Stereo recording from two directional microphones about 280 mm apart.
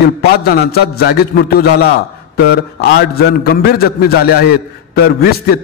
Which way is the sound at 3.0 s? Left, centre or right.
Left.